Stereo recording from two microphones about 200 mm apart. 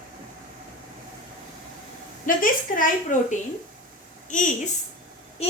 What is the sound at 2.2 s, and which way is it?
A woman's voice, 40° left (ahead or behind).